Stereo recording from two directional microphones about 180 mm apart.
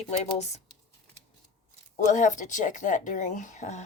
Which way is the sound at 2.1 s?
45° left (ahead or behind).